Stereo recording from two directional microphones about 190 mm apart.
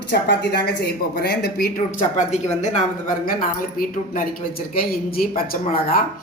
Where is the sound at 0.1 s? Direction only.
60° left (ahead or behind).